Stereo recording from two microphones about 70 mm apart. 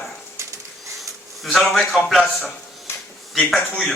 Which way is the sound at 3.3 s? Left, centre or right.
Centre.